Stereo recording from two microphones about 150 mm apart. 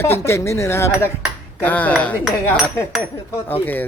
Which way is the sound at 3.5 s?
10° left (ahead or behind).